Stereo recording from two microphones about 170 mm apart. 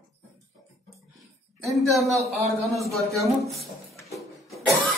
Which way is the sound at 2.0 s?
20° right (ahead or behind).